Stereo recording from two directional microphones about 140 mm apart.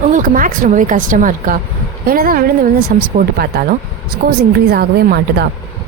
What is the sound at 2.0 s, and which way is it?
Speech, 90° right.